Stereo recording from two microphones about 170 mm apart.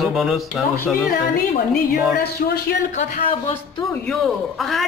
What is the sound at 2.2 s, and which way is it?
Speech, 70° left (ahead or behind).